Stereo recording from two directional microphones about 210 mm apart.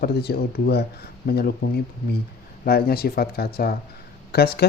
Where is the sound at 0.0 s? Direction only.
50° left (ahead or behind).